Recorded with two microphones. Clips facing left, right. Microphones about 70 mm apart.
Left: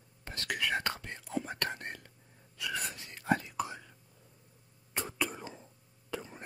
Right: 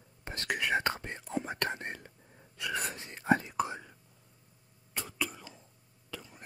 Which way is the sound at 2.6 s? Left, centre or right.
Right.